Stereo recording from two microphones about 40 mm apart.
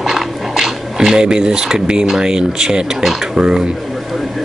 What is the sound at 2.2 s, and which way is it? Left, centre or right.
Speech, centre.